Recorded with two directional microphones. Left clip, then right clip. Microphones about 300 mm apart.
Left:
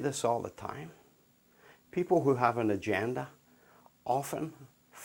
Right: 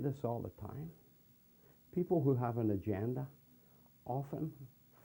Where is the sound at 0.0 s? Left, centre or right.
Centre.